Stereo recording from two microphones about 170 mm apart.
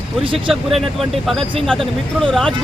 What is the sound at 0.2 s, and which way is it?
Speech, 30° right (ahead or behind).